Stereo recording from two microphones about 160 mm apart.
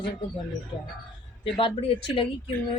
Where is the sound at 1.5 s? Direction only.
35° left (ahead or behind).